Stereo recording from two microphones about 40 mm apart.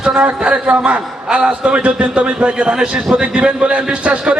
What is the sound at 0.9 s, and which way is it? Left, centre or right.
A man's voice, right.